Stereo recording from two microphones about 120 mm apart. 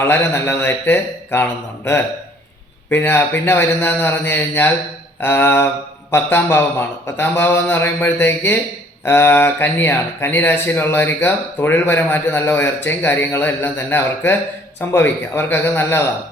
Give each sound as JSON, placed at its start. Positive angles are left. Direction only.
{"t": 0.0, "sound": "speech", "side_deg": 20}